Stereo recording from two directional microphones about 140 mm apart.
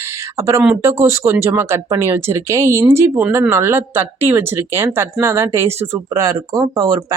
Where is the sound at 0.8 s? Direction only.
20° right (ahead or behind).